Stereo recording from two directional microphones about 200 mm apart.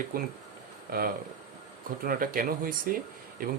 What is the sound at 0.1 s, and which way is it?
Speech, 45° right (ahead or behind).